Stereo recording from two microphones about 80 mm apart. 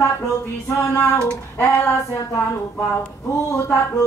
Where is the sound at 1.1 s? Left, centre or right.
Centre.